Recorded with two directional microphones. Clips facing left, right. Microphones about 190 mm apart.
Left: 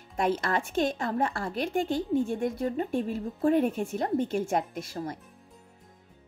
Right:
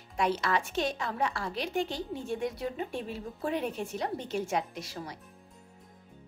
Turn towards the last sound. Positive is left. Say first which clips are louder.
# left 6 dB
turn(degrees=50)  # may be behind; listen again after turning